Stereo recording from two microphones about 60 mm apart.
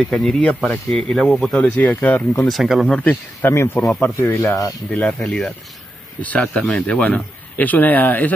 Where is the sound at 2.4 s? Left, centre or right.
Centre.